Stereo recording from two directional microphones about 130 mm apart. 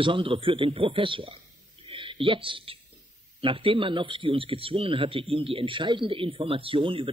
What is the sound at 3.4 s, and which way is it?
Speech, 45° right (ahead or behind).